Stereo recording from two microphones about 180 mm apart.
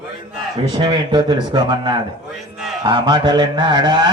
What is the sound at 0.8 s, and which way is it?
Carnatic music, 25° right (ahead or behind).